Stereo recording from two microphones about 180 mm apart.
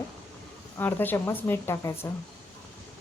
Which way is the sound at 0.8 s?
10° left (ahead or behind).